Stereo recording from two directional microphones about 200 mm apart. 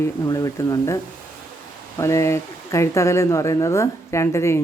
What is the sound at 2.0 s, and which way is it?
Speech, 15° left (ahead or behind).